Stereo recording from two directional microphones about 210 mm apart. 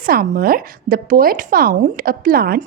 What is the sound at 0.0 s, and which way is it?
Speech, 45° right (ahead or behind).